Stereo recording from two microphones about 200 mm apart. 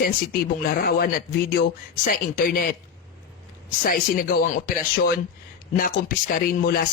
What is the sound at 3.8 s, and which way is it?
Speech, 45° left (ahead or behind).